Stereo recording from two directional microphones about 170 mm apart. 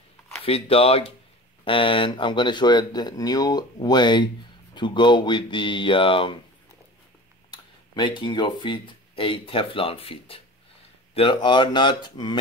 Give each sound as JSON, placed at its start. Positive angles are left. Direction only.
{"t": 0.5, "sound": "speech", "side_deg": 35}
{"t": 7.5, "sound": "speech", "side_deg": 25}